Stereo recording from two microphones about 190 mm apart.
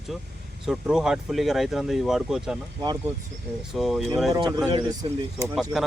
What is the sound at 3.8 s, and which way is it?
Speech, centre (ahead or behind).